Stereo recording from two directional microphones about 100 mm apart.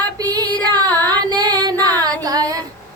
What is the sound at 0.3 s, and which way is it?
Female singing, 40° right (ahead or behind).